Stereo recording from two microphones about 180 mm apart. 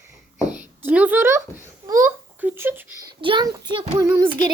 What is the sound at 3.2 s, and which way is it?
A child's voice, 25° right (ahead or behind).